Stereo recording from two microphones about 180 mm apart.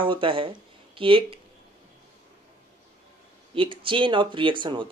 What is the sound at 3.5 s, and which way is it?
Speech, 30° right (ahead or behind).